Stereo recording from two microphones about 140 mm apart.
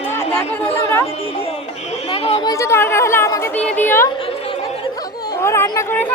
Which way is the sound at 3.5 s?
10° left (ahead or behind).